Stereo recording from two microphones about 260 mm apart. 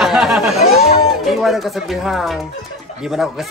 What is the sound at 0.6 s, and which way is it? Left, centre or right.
Chatter, left.